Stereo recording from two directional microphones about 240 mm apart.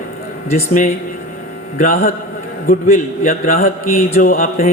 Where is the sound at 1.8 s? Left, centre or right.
Left.